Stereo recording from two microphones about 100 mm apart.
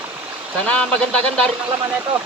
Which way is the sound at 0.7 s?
10° left (ahead or behind).